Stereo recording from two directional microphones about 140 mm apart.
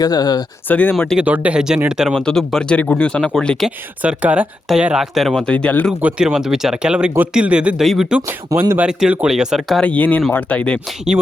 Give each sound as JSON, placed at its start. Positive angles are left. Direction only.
{"t": 0.0, "sound": "speech", "side_deg": 30}
{"t": 0.7, "sound": "speech", "side_deg": 10}
{"t": 1.2, "sound": "speech", "side_deg": -10}
{"t": 4.0, "sound": "speech", "side_deg": -10}
{"t": 6.0, "sound": "speech", "side_deg": -10}
{"t": 8.5, "sound": "speech", "side_deg": -15}
{"t": 8.9, "sound": "speech", "side_deg": -5}
{"t": 11.1, "sound": "speech", "side_deg": -15}